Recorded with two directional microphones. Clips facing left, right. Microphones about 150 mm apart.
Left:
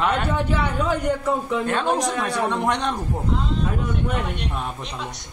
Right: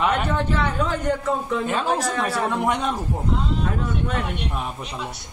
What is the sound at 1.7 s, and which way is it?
Speech, 5° right (ahead or behind).